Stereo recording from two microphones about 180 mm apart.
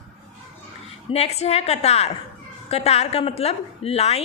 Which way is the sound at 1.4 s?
35° left (ahead or behind).